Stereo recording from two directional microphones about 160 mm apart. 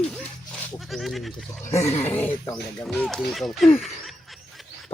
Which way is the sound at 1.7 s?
45° left (ahead or behind).